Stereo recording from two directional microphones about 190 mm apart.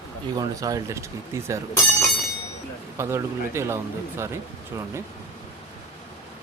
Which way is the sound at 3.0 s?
15° right (ahead or behind).